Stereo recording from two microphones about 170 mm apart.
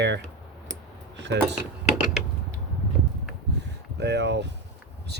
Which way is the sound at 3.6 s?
90° right.